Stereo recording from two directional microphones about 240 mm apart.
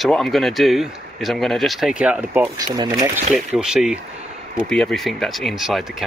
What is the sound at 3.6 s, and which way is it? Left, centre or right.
Speech, centre.